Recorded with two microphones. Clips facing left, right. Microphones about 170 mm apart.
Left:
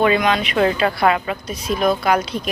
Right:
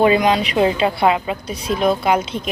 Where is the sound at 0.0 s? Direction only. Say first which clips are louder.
Right 2 dB; 30° right (ahead or behind).